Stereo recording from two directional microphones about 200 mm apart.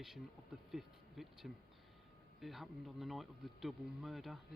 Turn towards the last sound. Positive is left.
turn(degrees=0)  # may be behind; listen again after turning